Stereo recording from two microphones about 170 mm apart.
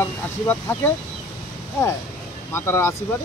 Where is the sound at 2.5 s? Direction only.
15° left (ahead or behind).